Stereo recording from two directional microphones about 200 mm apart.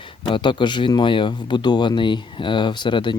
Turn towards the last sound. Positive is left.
turn(degrees=25)  # may be behind; listen again after turning